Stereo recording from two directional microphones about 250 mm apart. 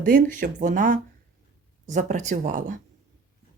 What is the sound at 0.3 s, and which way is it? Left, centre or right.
Speech, right.